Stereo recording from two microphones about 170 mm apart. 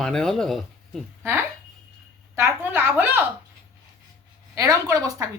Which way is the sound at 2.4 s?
15° right (ahead or behind).